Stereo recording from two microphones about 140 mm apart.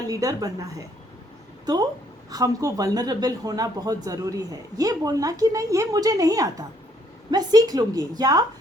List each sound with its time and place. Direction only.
0.1 s speech: 25° right (ahead or behind)